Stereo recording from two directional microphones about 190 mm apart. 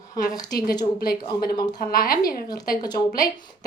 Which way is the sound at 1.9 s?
50° left (ahead or behind).